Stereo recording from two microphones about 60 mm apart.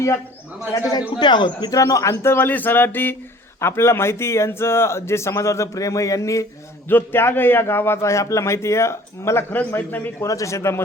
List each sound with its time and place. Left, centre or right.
0.7 s a man's voice: left
1.7 s speech: left
2.2 s a sound: left
3.6 s a man's voice: left
6.8 s a man's voice: left
9.5 s a sound: left
10.2 s speech: left